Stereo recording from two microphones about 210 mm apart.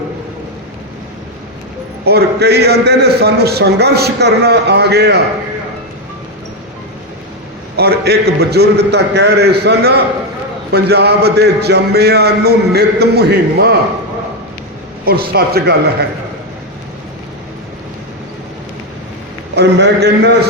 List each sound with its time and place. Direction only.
2.0 s a man's voice: 50° right (ahead or behind)
7.8 s a man's voice: 50° right (ahead or behind)
15.0 s a man's voice: 45° right (ahead or behind)
19.5 s a man's voice: 50° right (ahead or behind)